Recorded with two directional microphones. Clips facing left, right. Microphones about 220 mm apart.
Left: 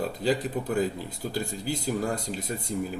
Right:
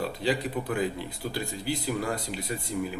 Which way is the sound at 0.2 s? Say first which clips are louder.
Left 2 dB; 45° left (ahead or behind).